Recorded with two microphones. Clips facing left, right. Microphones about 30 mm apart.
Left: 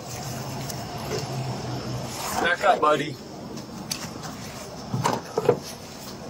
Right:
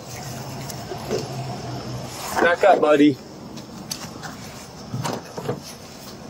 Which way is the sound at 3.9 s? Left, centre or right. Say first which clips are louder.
Right 1 dB; centre.